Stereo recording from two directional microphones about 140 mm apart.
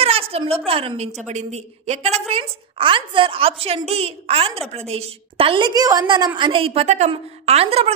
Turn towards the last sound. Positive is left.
turn(degrees=-45)  # may be behind; listen again after turning